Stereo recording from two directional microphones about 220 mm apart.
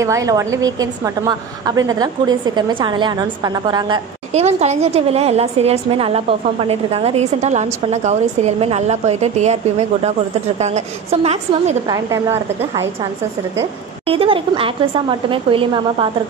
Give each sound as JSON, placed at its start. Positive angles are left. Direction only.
{"t": 0.0, "sound": "a woman's voice", "side_deg": -15}
{"t": 11.9, "sound": "a woman's voice", "side_deg": -15}
{"t": 14.0, "sound": "a woman's voice", "side_deg": -25}